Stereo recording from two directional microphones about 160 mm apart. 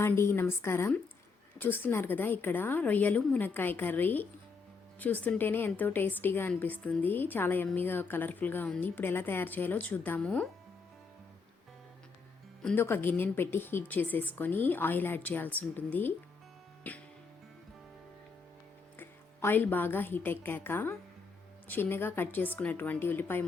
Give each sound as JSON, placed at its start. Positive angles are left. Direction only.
{"t": 0.0, "sound": "a woman's voice", "side_deg": 15}
{"t": 12.6, "sound": "a woman's voice", "side_deg": 15}
{"t": 18.9, "sound": "a woman's voice", "side_deg": 10}